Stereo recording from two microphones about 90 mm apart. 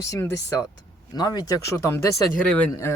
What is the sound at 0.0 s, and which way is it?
Speech, 35° left (ahead or behind).